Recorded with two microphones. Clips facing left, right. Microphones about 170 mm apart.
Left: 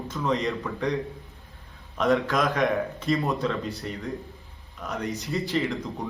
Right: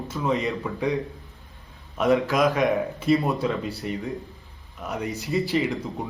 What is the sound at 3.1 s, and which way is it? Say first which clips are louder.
Speech: right 2 dB; 15° right (ahead or behind).